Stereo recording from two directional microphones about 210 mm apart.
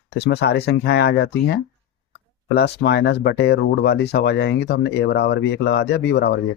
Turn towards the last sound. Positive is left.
turn(degrees=50)  # may be behind; listen again after turning